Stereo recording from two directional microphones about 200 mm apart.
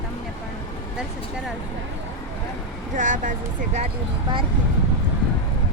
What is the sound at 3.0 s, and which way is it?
Speech, 40° right (ahead or behind).